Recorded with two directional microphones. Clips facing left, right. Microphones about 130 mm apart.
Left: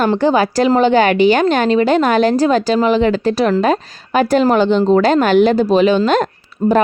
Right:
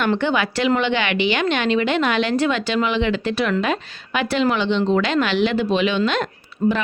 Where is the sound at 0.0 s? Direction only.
35° left (ahead or behind).